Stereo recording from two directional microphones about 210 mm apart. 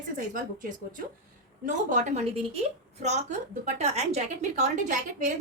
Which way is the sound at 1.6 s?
35° right (ahead or behind).